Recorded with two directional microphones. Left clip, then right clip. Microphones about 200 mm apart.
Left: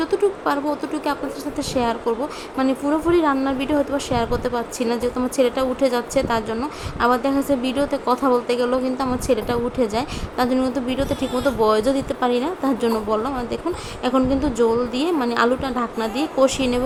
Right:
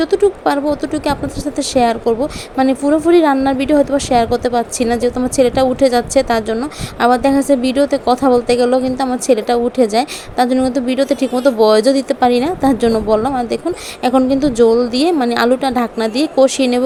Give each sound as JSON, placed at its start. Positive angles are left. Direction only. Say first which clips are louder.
{"t": 0.0, "sound": "a woman's voice", "louder": "right 7 dB", "side_deg": -20}